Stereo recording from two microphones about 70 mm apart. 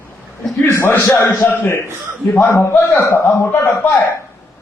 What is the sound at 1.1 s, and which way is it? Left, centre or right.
Speech, left.